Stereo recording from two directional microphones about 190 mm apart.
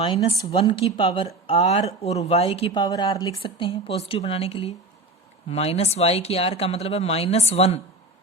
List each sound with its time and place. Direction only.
0.1 s speech: 30° left (ahead or behind)